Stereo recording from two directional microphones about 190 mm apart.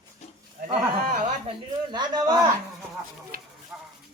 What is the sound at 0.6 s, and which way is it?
Speech, 55° right (ahead or behind).